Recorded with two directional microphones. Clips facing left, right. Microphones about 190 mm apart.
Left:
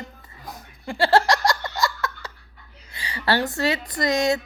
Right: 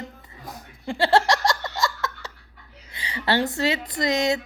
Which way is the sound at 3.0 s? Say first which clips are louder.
Even; 20° right (ahead or behind).